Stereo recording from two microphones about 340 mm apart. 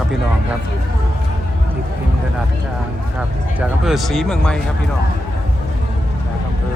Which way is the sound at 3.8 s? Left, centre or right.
Centre.